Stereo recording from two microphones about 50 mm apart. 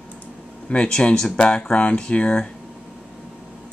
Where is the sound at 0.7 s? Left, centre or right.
Centre.